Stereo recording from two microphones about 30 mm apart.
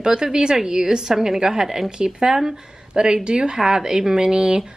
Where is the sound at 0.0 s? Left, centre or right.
Right.